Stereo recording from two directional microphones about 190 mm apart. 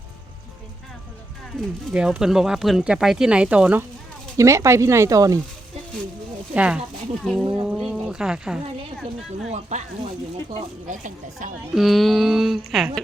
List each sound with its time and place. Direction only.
1.9 s speech: 5° right (ahead or behind)
6.5 s speech: 5° right (ahead or behind)
9.5 s speech: 35° right (ahead or behind)
11.7 s speech: centre (ahead or behind)